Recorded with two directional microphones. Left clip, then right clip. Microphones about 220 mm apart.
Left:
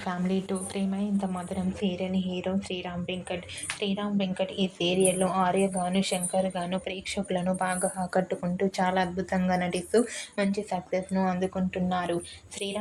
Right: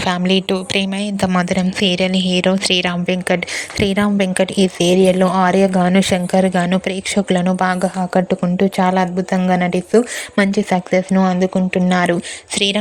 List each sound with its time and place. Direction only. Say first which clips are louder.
0.0 s a woman's voice: right 15 dB; 90° right
1.0 s a woman's voice: right 15 dB; 40° right (ahead or behind)